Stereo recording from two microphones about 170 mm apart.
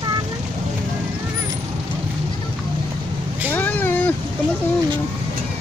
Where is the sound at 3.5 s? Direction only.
10° left (ahead or behind).